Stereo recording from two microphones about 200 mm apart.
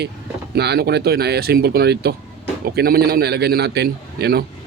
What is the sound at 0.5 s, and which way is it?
Speech, 55° right (ahead or behind).